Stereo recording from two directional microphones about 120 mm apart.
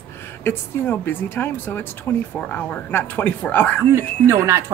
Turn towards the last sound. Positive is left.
turn(degrees=-25)  # may be behind; listen again after turning